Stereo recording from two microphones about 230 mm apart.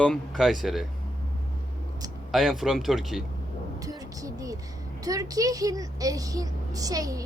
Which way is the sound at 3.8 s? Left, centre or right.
Centre.